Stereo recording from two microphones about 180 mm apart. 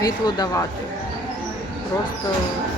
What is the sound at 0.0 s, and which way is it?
Speech, 20° left (ahead or behind).